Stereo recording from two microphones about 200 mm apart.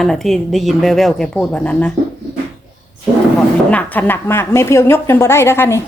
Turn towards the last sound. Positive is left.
turn(degrees=15)  # may be behind; listen again after turning